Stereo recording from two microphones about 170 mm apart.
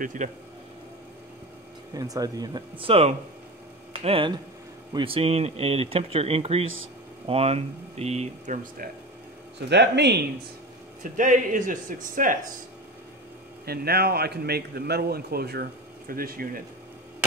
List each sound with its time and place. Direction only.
0.0 s speech: 50° right (ahead or behind)
2.0 s speech: 20° right (ahead or behind); by 8.5 s 40° right (ahead or behind)
9.7 s speech: 85° right
11.0 s speech: 50° right (ahead or behind)
13.7 s a man's voice: 65° right (ahead or behind)